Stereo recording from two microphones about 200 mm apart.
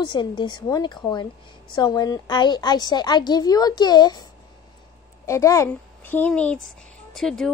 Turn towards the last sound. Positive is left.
turn(degrees=0)  # may be behind; listen again after turning